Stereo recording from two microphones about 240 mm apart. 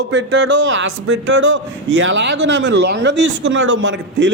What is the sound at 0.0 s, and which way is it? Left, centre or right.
A man's voice, right.